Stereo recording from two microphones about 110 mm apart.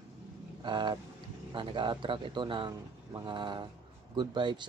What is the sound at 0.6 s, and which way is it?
Vehicle, 45° right (ahead or behind).